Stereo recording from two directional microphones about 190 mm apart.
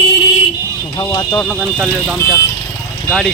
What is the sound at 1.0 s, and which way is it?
Speech, 20° left (ahead or behind).